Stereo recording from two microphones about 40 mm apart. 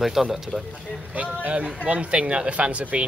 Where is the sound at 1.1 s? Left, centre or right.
Right.